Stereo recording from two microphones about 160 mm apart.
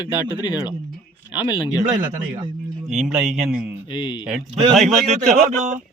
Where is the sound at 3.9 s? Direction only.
30° left (ahead or behind).